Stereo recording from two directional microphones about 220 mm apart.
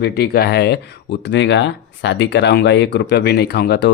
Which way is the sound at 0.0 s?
45° left (ahead or behind).